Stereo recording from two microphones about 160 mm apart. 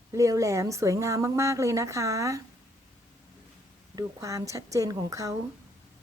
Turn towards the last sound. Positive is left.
turn(degrees=-20)  # may be behind; listen again after turning